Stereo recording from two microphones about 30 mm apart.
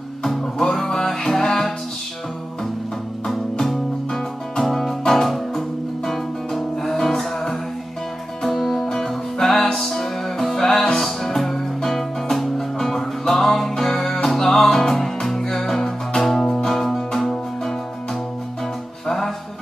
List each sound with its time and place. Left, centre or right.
0.2 s music: centre
3.3 s music: centre
8.8 s music: centre
19.0 s music: centre